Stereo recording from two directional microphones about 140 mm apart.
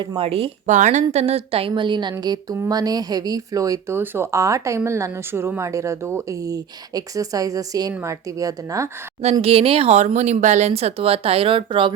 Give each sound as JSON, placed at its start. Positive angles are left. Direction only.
{"t": 0.0, "sound": "speech", "side_deg": -40}
{"t": 0.7, "sound": "a woman's voice", "side_deg": -60}
{"t": 9.4, "sound": "speech", "side_deg": -45}